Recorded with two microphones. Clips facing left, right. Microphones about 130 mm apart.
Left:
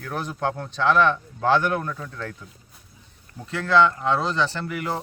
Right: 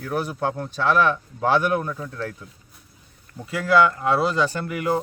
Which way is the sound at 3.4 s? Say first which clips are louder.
Right 1 dB; 10° right (ahead or behind).